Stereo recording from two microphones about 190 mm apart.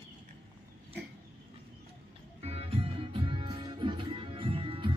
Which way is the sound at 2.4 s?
30° right (ahead or behind).